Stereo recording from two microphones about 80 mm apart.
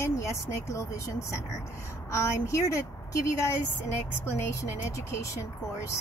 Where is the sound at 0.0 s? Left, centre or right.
Left.